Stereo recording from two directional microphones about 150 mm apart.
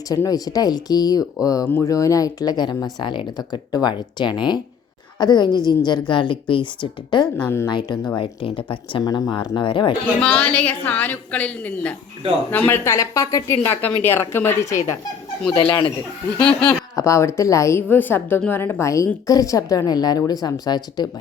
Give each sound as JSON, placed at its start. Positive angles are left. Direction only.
{"t": 0.1, "sound": "a woman's voice", "side_deg": 25}
{"t": 7.3, "sound": "a woman's voice", "side_deg": 15}
{"t": 7.7, "sound": "speech", "side_deg": 30}
{"t": 10.2, "sound": "a woman's voice", "side_deg": 5}
{"t": 15.5, "sound": "speech", "side_deg": 35}
{"t": 16.6, "sound": "a woman's voice", "side_deg": 20}